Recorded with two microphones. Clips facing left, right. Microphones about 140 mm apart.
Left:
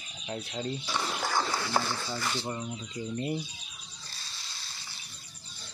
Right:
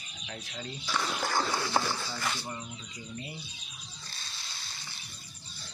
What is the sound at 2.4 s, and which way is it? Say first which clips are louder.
Speech: left 5 dB; 30° left (ahead or behind).